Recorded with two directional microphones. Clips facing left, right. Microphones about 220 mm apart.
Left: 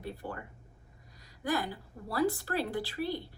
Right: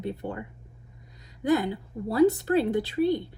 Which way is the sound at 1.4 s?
25° right (ahead or behind).